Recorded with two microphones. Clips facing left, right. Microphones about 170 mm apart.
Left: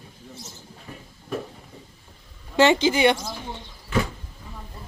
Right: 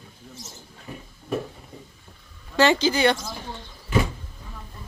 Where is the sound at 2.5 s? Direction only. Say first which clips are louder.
Left 2 dB; 20° left (ahead or behind).